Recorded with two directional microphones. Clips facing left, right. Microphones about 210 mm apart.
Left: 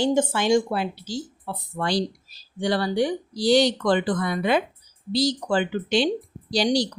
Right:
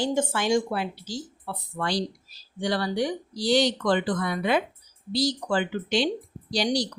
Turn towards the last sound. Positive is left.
turn(degrees=30)  # may be behind; listen again after turning